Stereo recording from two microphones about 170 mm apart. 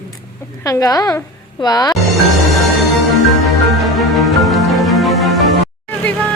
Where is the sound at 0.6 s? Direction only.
20° left (ahead or behind).